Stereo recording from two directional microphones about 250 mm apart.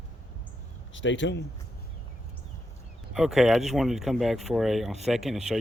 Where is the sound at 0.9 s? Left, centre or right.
Left.